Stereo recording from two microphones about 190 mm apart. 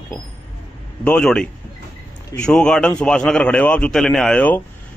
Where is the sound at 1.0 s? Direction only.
5° left (ahead or behind).